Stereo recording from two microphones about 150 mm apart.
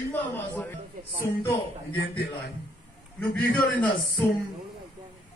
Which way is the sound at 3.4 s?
10° left (ahead or behind).